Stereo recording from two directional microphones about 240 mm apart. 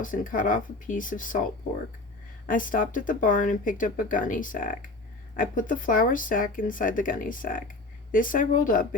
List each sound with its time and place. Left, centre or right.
0.0 s speech: left
2.5 s speech: left